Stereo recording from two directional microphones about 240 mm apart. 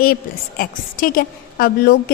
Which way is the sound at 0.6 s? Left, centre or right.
Left.